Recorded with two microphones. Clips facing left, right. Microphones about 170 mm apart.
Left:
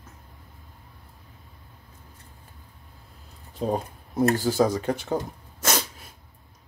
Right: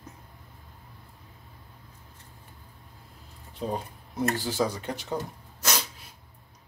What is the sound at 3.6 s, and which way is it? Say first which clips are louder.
Speech: left 5 dB; 45° left (ahead or behind).